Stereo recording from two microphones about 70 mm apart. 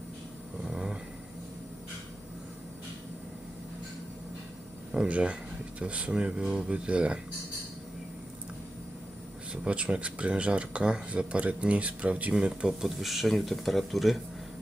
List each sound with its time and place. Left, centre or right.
0.7 s vehicle: centre
4.9 s speech: centre
9.5 s speech: centre